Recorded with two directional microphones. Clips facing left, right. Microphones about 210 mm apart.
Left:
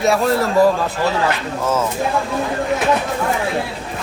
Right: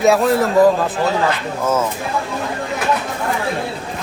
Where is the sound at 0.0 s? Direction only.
Centre (ahead or behind).